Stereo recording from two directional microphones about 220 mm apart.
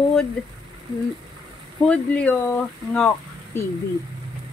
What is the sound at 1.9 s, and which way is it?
Speech, 5° left (ahead or behind).